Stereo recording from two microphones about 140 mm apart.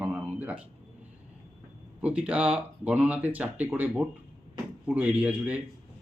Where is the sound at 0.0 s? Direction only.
5° right (ahead or behind).